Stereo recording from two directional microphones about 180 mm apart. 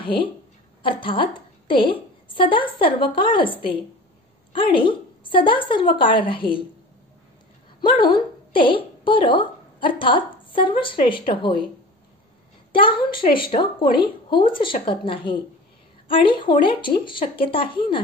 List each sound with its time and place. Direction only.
0.0 s a woman's voice: 30° left (ahead or behind)
7.8 s a woman's voice: 25° left (ahead or behind)
12.7 s a woman's voice: 30° left (ahead or behind)